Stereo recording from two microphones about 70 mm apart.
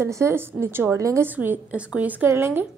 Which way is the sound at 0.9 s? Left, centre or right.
Right.